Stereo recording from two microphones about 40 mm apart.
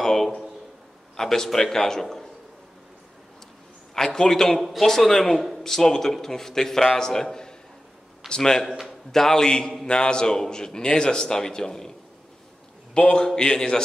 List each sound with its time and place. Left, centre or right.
0.0 s a sound: centre
1.1 s a man's voice: centre
3.9 s a man's voice: centre
4.6 s a man's voice: centre
13.1 s a man's voice: centre